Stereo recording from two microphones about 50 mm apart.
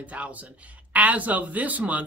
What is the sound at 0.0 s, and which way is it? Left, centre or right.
Speech, right.